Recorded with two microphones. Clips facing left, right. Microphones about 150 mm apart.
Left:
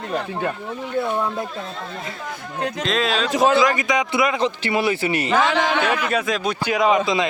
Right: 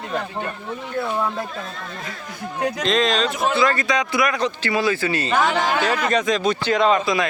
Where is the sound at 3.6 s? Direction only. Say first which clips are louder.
Left 1 dB; 15° left (ahead or behind).